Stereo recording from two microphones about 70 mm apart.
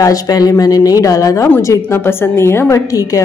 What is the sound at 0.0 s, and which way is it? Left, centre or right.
A woman's voice, left.